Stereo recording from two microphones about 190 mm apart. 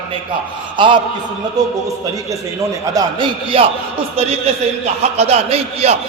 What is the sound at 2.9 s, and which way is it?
Speech, 25° right (ahead or behind).